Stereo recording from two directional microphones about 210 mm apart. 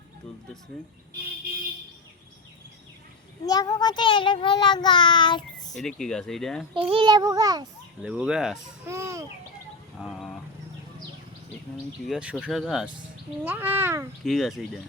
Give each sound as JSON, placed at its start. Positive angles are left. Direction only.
{"t": 3.4, "sound": "a child's voice", "side_deg": 20}
{"t": 5.7, "sound": "speech", "side_deg": 0}
{"t": 6.7, "sound": "a child's voice", "side_deg": -25}
{"t": 8.0, "sound": "speech", "side_deg": -5}
{"t": 10.0, "sound": "a sound", "side_deg": 0}
{"t": 12.0, "sound": "speech", "side_deg": -5}
{"t": 14.3, "sound": "speech", "side_deg": 0}